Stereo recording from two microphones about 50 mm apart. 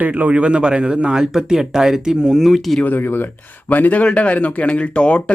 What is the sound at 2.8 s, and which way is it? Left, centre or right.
A man's voice, left.